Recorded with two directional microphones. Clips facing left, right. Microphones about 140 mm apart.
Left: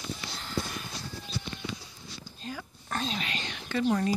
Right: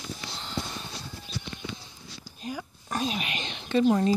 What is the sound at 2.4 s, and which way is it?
Speech, 15° right (ahead or behind).